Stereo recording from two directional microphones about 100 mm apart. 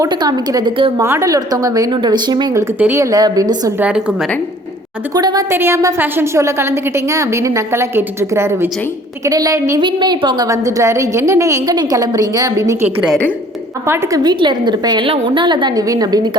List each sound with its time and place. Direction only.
0.1 s a woman's voice: 45° right (ahead or behind)
1.0 s a woman's voice: 30° right (ahead or behind)
1.9 s a woman's voice: 50° right (ahead or behind)
2.7 s a woman's voice: 15° right (ahead or behind)
3.0 s a woman's voice: 40° right (ahead or behind)
3.8 s a woman's voice: 10° right (ahead or behind)
5.1 s a woman's voice: 40° right (ahead or behind)
5.5 s a woman's voice: 25° right (ahead or behind)
9.2 s a woman's voice: 35° right (ahead or behind)
9.8 s a woman's voice: 50° right (ahead or behind); by 11.7 s 30° right (ahead or behind)
11.7 s a woman's voice: 40° right (ahead or behind); by 14.2 s 25° right (ahead or behind)
14.2 s a woman's voice: 50° right (ahead or behind)